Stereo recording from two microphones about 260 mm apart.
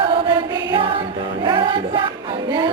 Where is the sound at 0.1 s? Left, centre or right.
Centre.